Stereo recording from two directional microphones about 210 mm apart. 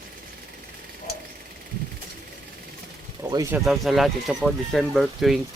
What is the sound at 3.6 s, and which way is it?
Speech, centre (ahead or behind).